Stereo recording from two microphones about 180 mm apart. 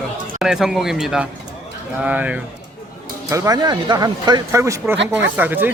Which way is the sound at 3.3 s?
20° right (ahead or behind).